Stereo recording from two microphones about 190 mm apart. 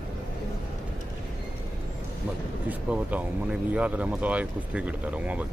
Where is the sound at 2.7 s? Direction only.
10° right (ahead or behind).